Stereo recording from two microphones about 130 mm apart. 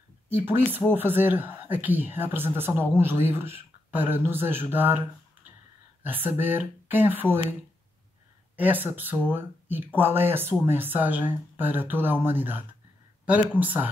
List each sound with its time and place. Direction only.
0.7 s speech: 15° right (ahead or behind)
6.0 s speech: 15° right (ahead or behind)
8.5 s speech: 15° right (ahead or behind)